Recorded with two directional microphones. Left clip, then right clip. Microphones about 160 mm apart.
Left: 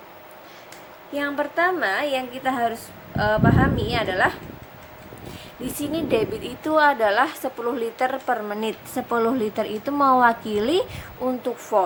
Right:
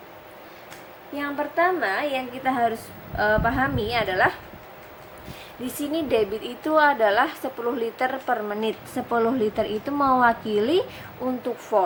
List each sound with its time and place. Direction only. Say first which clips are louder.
1.1 s a woman's voice: left 2 dB; 30° left (ahead or behind); by 4.4 s 5° left (ahead or behind)
5.6 s a woman's voice: left 1 dB; 10° left (ahead or behind)